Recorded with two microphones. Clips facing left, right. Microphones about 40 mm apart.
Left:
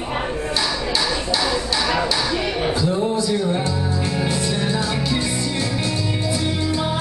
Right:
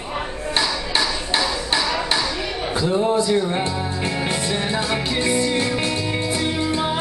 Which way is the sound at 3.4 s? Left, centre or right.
Right.